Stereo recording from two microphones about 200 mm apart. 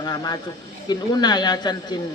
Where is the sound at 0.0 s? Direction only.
20° left (ahead or behind).